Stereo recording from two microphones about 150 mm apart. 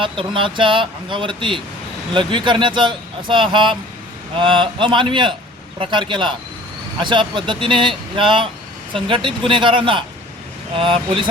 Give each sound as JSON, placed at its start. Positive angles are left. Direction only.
{"t": 0.0, "sound": "speech", "side_deg": -35}